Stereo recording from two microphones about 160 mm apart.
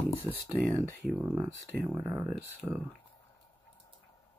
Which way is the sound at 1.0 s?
5° right (ahead or behind).